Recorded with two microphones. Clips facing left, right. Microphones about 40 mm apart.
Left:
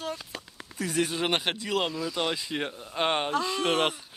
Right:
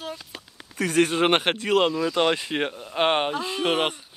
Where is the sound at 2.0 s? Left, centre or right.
Right.